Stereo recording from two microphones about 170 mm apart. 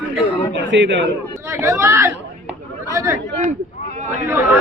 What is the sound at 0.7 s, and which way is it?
Speech, 90° right.